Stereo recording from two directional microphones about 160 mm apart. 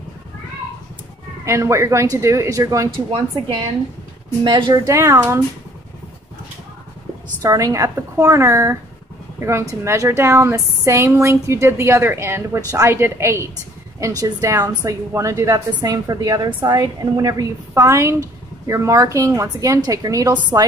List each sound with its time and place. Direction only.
1.4 s a woman's voice: 20° right (ahead or behind)
4.5 s speech: 25° right (ahead or behind)
7.4 s a woman's voice: 20° right (ahead or behind)